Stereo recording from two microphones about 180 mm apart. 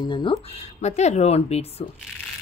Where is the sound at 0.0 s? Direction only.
25° left (ahead or behind).